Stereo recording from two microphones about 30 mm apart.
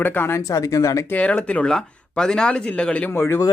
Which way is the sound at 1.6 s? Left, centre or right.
Left.